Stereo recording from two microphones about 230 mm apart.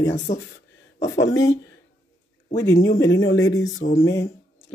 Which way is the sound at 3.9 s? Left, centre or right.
Centre.